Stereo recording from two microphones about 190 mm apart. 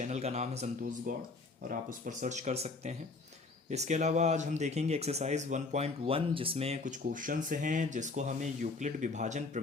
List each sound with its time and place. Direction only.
0.0 s speech: 35° right (ahead or behind)